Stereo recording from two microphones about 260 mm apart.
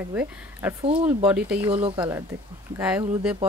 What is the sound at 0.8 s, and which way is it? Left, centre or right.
Speech, right.